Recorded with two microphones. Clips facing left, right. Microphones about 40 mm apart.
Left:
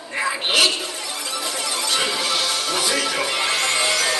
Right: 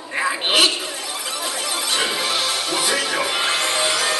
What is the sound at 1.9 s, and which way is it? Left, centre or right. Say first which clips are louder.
Music: right 1 dB; centre.